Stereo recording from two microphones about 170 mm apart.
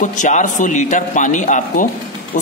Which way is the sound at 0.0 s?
45° left (ahead or behind).